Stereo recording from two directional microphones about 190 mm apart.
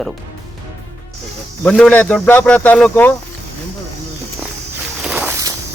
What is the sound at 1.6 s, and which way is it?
Speech, 5° left (ahead or behind).